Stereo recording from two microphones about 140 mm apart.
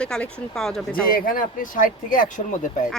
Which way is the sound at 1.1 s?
90° left.